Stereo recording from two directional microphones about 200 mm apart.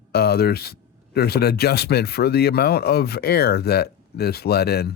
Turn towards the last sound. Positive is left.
turn(degrees=55)  # may be behind; listen again after turning